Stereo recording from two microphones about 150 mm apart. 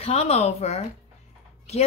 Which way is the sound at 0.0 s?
45° left (ahead or behind).